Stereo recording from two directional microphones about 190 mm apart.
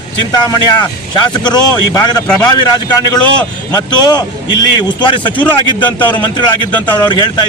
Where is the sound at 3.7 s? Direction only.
20° left (ahead or behind).